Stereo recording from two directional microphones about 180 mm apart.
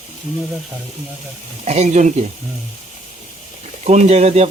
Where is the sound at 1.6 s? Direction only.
40° right (ahead or behind).